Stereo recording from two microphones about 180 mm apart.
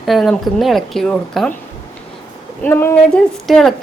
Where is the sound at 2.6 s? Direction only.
10° left (ahead or behind).